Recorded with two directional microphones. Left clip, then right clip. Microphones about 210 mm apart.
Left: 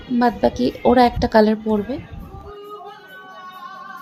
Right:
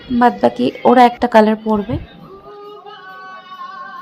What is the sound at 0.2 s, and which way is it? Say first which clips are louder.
A woman's voice: right 5 dB; 15° right (ahead or behind).